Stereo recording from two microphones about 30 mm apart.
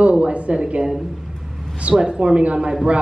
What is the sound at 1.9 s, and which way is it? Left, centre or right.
Speech, right.